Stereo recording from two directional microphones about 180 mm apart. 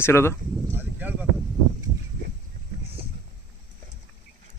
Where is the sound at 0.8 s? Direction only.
10° right (ahead or behind).